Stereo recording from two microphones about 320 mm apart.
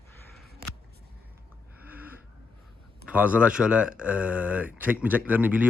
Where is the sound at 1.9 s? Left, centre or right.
Centre.